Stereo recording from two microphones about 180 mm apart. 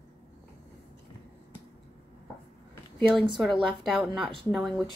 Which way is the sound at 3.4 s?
Centre (ahead or behind).